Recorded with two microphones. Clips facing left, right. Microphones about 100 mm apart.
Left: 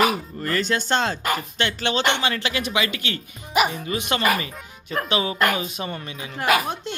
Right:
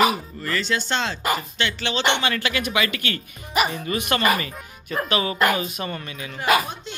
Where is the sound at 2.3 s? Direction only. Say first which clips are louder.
Right 1 dB; 25° left (ahead or behind).